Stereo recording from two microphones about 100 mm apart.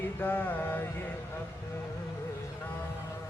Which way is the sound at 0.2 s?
20° left (ahead or behind).